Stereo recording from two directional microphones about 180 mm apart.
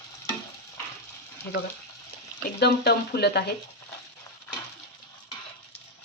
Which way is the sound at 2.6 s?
65° left (ahead or behind).